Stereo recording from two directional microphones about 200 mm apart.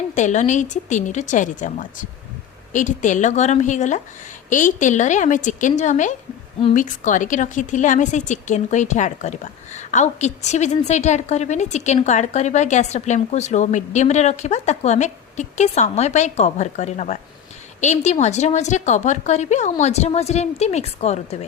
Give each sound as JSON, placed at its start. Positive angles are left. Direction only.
{"t": 0.1, "sound": "a woman's voice", "side_deg": 35}